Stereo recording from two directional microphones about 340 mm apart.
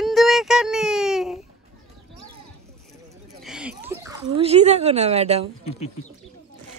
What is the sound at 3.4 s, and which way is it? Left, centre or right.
Speech, centre.